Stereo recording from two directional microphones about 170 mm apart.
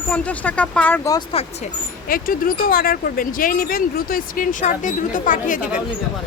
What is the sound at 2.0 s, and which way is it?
Speech, 60° left (ahead or behind).